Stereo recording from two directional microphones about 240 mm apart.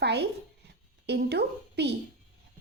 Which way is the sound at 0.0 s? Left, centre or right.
Right.